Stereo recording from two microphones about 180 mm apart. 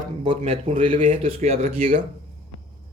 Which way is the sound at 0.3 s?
35° right (ahead or behind).